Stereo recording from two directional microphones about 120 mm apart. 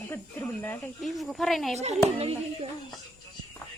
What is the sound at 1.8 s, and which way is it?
Speech, 60° right (ahead or behind).